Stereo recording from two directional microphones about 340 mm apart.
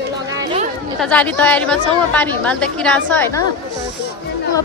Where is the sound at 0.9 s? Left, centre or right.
Centre.